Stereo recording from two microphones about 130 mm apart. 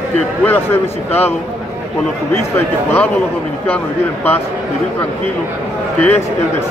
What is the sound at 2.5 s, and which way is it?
A man's voice, 15° left (ahead or behind).